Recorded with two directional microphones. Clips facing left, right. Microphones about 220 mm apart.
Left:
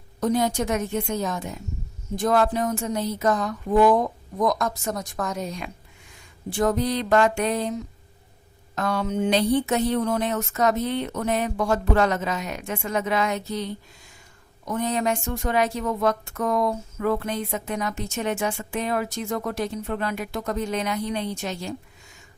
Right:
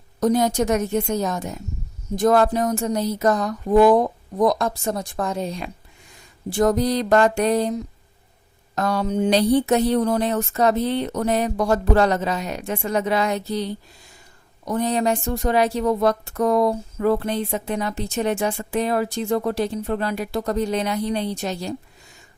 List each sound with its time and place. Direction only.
0.2 s speech: 40° right (ahead or behind)